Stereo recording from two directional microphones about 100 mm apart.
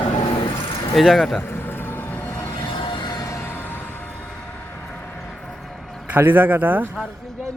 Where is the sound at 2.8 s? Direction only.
50° left (ahead or behind); by 4.1 s 20° left (ahead or behind).